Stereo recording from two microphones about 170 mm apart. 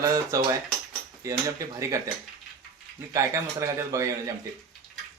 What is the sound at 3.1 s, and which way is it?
A man's voice, 20° right (ahead or behind).